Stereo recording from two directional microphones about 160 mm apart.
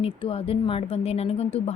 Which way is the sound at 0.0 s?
35° left (ahead or behind).